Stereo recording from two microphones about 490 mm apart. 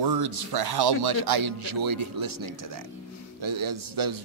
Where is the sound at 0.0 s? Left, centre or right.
Right.